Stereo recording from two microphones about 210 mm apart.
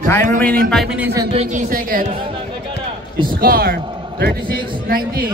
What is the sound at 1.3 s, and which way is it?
Speech, 40° right (ahead or behind).